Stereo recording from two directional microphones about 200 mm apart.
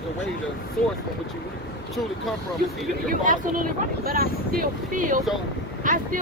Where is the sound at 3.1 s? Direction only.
45° right (ahead or behind).